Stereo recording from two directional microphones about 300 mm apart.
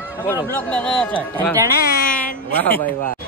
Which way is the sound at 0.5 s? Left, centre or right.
Centre.